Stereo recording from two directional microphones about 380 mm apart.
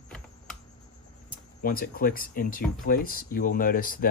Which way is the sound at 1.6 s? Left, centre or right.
Left.